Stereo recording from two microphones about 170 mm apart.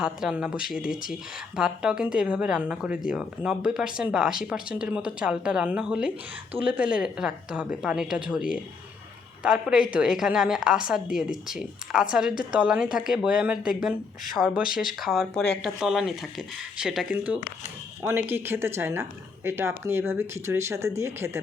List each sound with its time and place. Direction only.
0.0 s speech: 5° right (ahead or behind)